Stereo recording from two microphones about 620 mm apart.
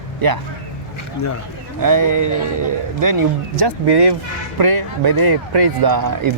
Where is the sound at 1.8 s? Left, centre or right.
Right.